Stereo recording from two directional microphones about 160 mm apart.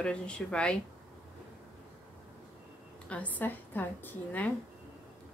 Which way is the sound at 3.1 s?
10° left (ahead or behind).